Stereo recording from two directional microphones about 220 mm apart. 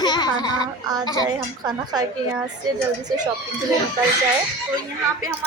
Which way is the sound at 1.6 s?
20° right (ahead or behind).